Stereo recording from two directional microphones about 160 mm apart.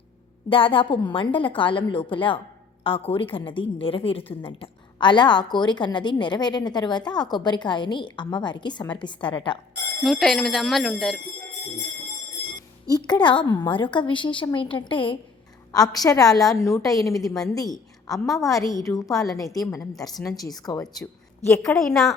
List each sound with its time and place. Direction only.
0.5 s a woman's voice: 35° left (ahead or behind)
10.0 s speech: centre (ahead or behind)
12.9 s a woman's voice: 25° left (ahead or behind)
21.6 s speech: 5° left (ahead or behind)